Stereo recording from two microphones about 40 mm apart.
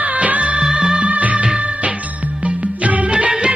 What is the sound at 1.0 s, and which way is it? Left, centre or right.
Music of bollywood, right.